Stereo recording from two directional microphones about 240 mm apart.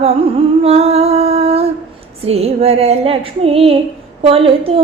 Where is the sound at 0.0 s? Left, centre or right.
Right.